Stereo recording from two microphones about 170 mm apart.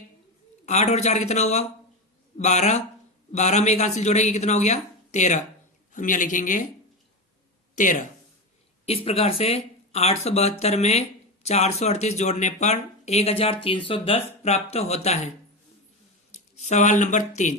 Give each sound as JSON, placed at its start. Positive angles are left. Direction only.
{"t": 0.6, "sound": "a woman's voice", "side_deg": 40}
{"t": 7.8, "sound": "a woman's voice", "side_deg": 50}
{"t": 9.0, "sound": "speech", "side_deg": 35}
{"t": 16.6, "sound": "a woman's voice", "side_deg": 45}